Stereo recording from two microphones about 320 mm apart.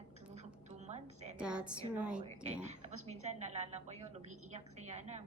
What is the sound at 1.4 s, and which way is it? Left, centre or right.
Speech, centre.